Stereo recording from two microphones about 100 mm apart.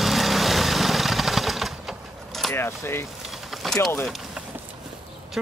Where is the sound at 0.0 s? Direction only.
Centre (ahead or behind).